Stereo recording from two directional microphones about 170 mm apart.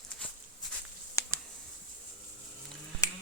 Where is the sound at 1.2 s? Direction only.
20° left (ahead or behind).